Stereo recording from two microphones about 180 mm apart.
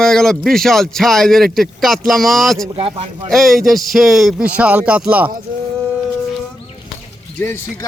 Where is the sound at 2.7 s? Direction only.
30° right (ahead or behind).